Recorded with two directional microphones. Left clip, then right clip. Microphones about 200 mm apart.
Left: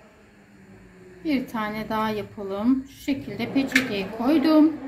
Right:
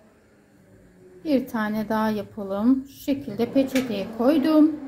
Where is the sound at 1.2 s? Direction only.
60° right (ahead or behind).